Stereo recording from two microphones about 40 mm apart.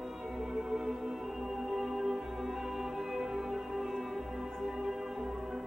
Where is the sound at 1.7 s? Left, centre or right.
Centre.